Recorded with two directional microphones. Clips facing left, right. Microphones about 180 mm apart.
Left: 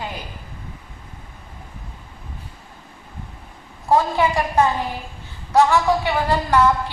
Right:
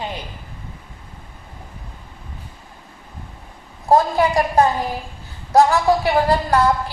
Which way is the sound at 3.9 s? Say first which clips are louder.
Right 2 dB; 35° right (ahead or behind).